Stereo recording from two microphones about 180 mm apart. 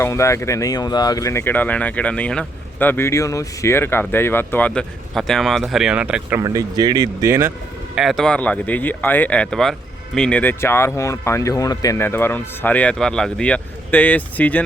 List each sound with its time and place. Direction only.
0.0 s speech: 15° left (ahead or behind); by 6.4 s 5° right (ahead or behind)
6.4 s speech: 20° right (ahead or behind)
7.9 s speech: centre (ahead or behind)